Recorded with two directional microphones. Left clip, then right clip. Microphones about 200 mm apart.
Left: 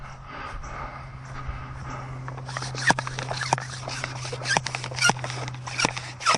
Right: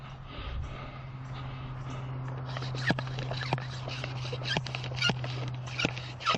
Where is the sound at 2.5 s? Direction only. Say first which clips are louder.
Left 9 dB; 15° left (ahead or behind).